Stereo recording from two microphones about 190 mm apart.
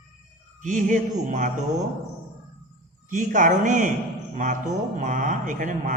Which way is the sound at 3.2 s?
40° right (ahead or behind).